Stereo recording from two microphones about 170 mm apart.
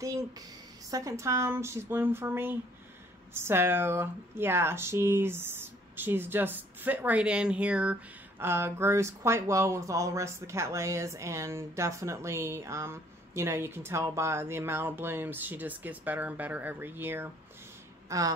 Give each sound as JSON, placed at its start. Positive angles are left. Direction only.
{"t": 0.8, "sound": "speech", "side_deg": -20}